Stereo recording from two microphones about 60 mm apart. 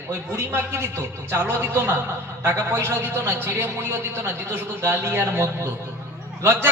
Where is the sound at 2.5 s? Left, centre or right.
Right.